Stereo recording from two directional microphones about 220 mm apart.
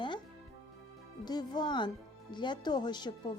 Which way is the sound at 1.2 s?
20° left (ahead or behind).